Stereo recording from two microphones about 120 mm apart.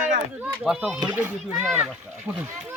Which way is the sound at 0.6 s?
Centre (ahead or behind).